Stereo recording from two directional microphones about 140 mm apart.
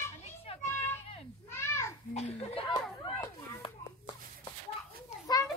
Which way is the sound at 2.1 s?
50° left (ahead or behind).